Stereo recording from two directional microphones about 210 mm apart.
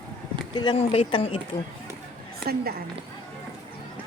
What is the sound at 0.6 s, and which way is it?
Speech, 25° left (ahead or behind).